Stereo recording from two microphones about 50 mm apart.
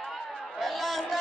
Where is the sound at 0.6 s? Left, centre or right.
Centre.